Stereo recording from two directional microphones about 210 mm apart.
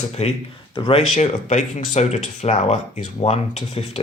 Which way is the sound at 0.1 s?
30° left (ahead or behind).